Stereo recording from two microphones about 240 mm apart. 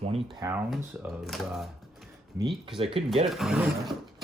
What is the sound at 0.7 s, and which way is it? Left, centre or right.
Speech, centre.